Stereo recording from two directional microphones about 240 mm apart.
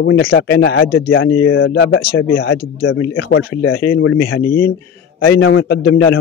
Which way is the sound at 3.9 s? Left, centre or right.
Left.